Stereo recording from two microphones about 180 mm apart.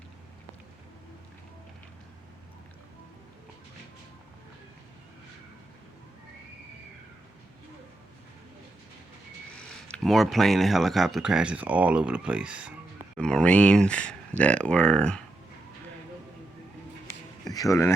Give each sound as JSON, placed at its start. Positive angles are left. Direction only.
{"t": 9.6, "sound": "speech", "side_deg": 5}
{"t": 13.1, "sound": "speech", "side_deg": 5}
{"t": 17.5, "sound": "a man's voice", "side_deg": 20}